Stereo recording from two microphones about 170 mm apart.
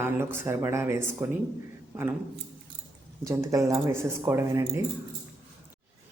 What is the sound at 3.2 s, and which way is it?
A woman's voice, 20° right (ahead or behind).